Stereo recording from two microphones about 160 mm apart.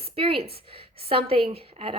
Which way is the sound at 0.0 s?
35° right (ahead or behind).